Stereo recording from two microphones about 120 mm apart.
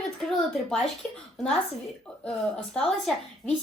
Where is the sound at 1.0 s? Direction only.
10° left (ahead or behind).